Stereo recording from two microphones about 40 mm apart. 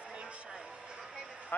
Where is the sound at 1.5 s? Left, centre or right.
Left.